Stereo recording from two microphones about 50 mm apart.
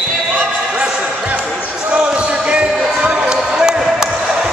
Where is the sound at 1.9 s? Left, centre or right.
Right.